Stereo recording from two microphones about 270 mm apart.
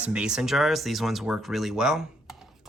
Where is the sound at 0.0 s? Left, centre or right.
Centre.